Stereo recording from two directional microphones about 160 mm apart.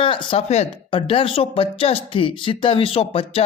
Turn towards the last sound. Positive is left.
turn(degrees=35)  # may be behind; listen again after turning